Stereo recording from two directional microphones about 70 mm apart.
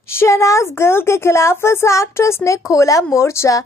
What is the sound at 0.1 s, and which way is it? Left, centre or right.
A woman's voice, left.